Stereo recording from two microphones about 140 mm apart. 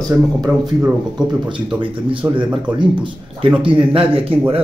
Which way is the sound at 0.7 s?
10° right (ahead or behind).